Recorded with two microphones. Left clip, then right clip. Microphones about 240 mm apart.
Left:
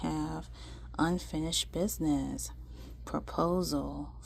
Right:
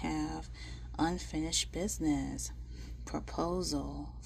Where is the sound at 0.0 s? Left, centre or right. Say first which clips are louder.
Left 1 dB; left.